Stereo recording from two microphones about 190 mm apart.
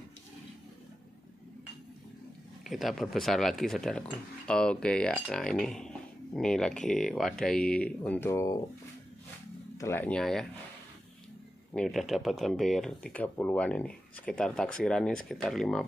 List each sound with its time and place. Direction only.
2.6 s speech: centre (ahead or behind)
8.3 s speech: 15° left (ahead or behind)
9.8 s speech: 10° left (ahead or behind)
11.7 s speech: centre (ahead or behind)